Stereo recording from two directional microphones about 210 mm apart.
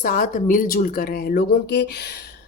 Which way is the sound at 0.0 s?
40° left (ahead or behind).